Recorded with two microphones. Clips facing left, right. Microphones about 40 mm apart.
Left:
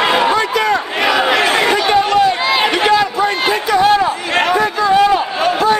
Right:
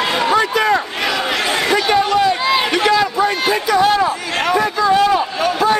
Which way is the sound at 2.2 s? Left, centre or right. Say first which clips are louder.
Left 2 dB; left.